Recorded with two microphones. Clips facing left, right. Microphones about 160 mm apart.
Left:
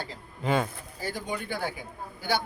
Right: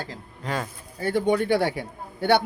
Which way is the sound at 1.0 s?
65° right (ahead or behind).